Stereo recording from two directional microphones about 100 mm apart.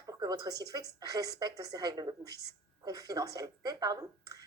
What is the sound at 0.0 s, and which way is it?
A woman's voice, 40° right (ahead or behind).